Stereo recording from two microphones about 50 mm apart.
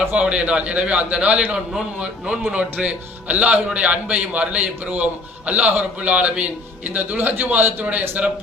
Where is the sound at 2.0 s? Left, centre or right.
Centre.